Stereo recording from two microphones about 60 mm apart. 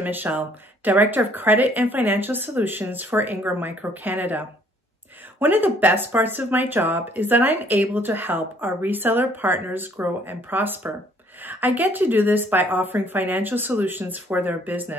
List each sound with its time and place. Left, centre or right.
0.0 s speech: right